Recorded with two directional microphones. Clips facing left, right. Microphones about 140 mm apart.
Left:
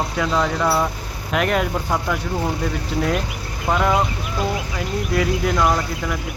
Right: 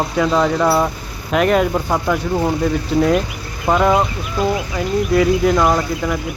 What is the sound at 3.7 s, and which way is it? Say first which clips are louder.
Speech: right 5 dB; 35° right (ahead or behind).